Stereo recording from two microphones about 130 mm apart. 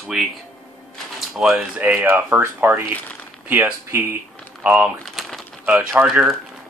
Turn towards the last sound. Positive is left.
turn(degrees=-5)  # may be behind; listen again after turning